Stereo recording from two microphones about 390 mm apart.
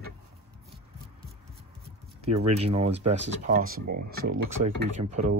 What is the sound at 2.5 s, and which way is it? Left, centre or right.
Speech, centre.